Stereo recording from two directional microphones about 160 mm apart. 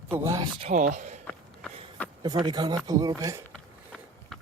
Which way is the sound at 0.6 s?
45° right (ahead or behind).